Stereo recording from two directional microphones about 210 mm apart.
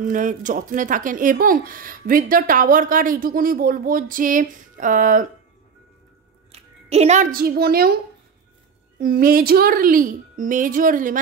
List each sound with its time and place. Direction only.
0.0 s speech: 40° right (ahead or behind)
6.5 s a child's voice: 30° right (ahead or behind); by 7.9 s 45° right (ahead or behind)
9.0 s speech: 45° right (ahead or behind)